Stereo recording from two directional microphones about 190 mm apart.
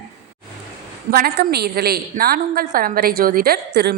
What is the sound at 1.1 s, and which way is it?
A woman's voice, 50° right (ahead or behind).